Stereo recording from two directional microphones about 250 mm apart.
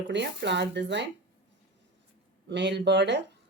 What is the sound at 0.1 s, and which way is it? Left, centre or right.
Speech, right.